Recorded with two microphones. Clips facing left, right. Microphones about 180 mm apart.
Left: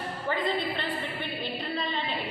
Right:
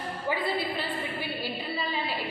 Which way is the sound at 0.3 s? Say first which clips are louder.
Even; 10° right (ahead or behind).